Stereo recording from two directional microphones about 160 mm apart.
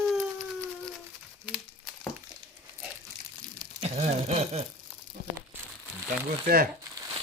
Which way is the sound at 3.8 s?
45° right (ahead or behind).